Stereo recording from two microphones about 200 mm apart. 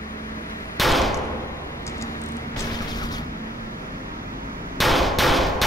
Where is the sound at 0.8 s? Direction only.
Centre (ahead or behind).